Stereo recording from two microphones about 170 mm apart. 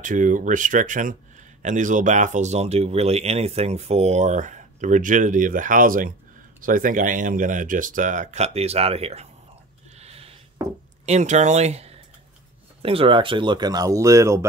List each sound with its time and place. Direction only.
0.0 s speech: 50° right (ahead or behind)
9.9 s a sound: 35° right (ahead or behind)
11.1 s speech: 45° right (ahead or behind); by 14.4 s 15° right (ahead or behind)